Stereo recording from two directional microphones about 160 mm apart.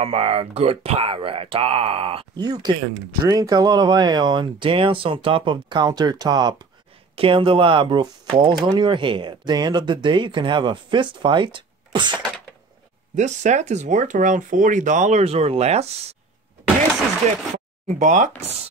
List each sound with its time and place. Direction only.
0.0 s speech: 40° right (ahead or behind)
13.1 s speech: 45° right (ahead or behind)
17.8 s speech: 50° right (ahead or behind)